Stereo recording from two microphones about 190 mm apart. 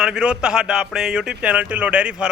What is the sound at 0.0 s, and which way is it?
A man's voice, 5° right (ahead or behind).